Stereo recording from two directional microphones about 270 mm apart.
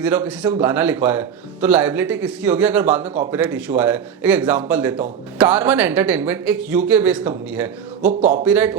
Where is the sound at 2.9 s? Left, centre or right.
Right.